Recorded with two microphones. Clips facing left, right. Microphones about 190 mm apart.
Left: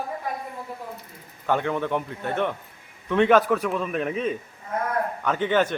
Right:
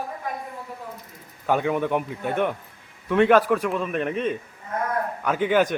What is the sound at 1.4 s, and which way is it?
A man's voice, 10° right (ahead or behind).